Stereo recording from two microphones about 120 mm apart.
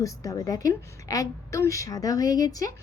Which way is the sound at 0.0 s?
30° left (ahead or behind).